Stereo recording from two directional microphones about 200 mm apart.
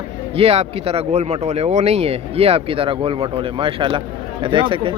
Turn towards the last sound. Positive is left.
turn(degrees=-25)  # may be behind; listen again after turning